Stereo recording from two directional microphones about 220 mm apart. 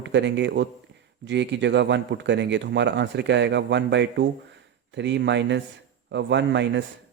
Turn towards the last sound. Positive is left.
turn(degrees=-55)  # may be behind; listen again after turning